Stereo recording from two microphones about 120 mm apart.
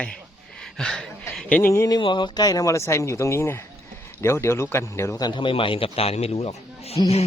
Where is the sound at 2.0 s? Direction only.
45° left (ahead or behind); by 5.1 s 20° left (ahead or behind).